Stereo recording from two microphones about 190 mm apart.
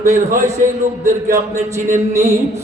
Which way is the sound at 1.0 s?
15° right (ahead or behind).